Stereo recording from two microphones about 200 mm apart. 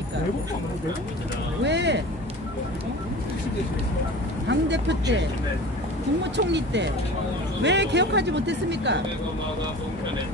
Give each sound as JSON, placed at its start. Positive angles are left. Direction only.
{"t": 1.6, "sound": "speech", "side_deg": -60}
{"t": 4.5, "sound": "speech", "side_deg": -60}
{"t": 6.3, "sound": "speech", "side_deg": -60}